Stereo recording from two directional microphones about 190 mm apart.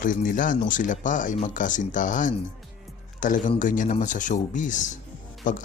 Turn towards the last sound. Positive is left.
turn(degrees=45)  # may be behind; listen again after turning